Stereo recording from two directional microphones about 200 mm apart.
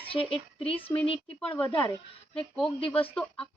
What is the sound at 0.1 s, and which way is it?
Speech, 25° left (ahead or behind).